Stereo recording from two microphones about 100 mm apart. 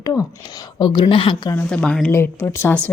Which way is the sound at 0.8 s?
50° left (ahead or behind).